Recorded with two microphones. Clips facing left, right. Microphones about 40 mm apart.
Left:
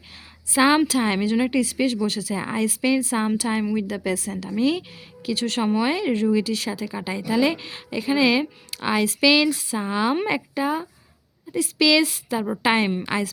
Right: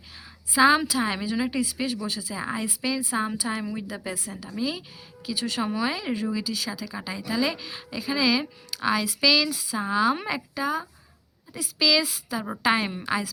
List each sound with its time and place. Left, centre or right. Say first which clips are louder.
0.5 s speech: left 2 dB; left
3.5 s a woman's voice: left 7 dB; left
3.8 s a woman's voice: left 7 dB; left
4.5 s speech: left 8 dB; left
6.7 s a woman's voice: left 5 dB; left
9.7 s a woman's voice: right 2 dB; left
11.5 s speech: left 5 dB; left
12.6 s a woman's voice: left 2 dB; left